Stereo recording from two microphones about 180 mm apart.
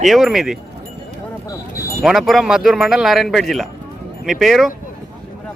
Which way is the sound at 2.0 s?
Centre (ahead or behind).